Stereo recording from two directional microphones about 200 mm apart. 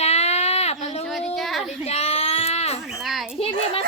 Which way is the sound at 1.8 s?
30° left (ahead or behind).